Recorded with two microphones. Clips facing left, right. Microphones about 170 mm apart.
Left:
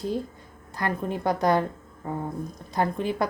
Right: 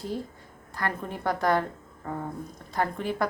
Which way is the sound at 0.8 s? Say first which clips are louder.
Left 4 dB; 15° left (ahead or behind).